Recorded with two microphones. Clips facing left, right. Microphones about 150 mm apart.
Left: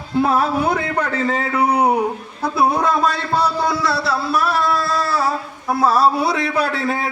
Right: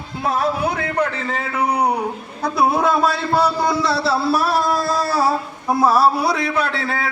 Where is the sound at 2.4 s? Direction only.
Centre (ahead or behind); by 4.0 s 20° right (ahead or behind).